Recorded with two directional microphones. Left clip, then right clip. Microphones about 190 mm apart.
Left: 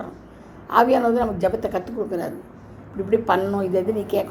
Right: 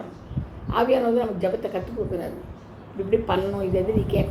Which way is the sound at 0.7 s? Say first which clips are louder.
Left 4 dB; 50° left (ahead or behind).